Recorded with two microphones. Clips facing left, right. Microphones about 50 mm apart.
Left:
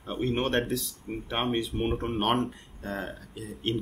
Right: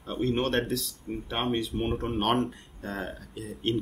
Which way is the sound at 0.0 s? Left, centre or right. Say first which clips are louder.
Right 1 dB; centre.